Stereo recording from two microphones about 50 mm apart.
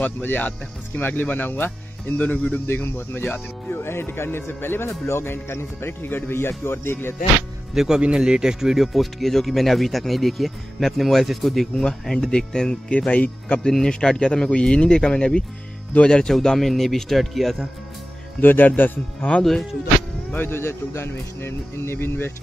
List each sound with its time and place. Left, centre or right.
0.0 s speech: left
2.6 s speech: left
7.7 s speech: centre; by 13.6 s left
13.7 s speech: centre
18.4 s speech: left
20.3 s speech: left